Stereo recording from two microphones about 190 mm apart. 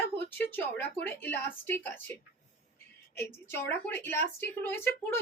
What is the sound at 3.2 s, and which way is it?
A woman's voice, 10° left (ahead or behind).